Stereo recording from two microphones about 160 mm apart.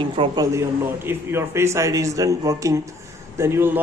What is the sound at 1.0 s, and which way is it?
A man's voice, 15° right (ahead or behind).